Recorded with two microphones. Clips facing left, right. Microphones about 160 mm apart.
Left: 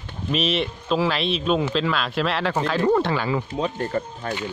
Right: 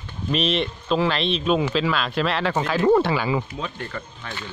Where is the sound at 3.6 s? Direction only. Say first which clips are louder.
Left 7 dB; 40° left (ahead or behind).